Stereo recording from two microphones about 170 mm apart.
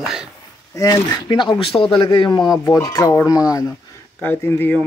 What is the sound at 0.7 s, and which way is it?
Speech, 20° left (ahead or behind).